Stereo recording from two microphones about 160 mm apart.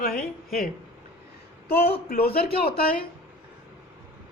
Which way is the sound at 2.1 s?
70° left (ahead or behind).